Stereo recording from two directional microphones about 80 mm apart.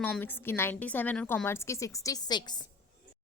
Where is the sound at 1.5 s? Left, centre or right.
Left.